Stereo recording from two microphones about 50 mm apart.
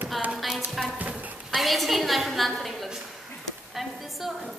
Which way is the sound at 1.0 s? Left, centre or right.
Right.